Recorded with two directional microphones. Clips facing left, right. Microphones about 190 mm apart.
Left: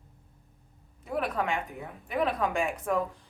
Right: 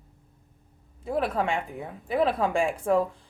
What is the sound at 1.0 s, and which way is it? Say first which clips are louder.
A woman's voice: right 4 dB; 30° right (ahead or behind).